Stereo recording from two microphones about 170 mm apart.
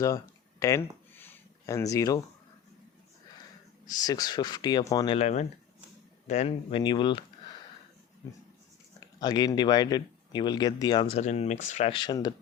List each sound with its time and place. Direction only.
0.6 s a sound: 15° left (ahead or behind)
4.0 s speech: 20° left (ahead or behind)
5.1 s speech: 40° left (ahead or behind)
9.0 s speech: 25° left (ahead or behind)
11.2 s speech: 40° left (ahead or behind)
11.9 s speech: 25° left (ahead or behind)